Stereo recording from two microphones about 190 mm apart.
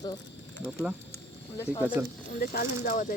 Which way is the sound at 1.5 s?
15° left (ahead or behind).